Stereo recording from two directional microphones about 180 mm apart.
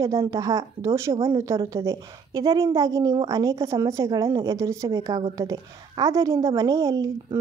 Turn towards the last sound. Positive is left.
turn(degrees=-20)  # may be behind; listen again after turning